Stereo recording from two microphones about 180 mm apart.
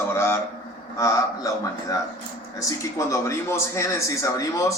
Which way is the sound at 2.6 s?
15° left (ahead or behind).